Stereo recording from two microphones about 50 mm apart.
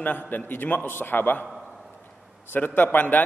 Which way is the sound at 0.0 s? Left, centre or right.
Left.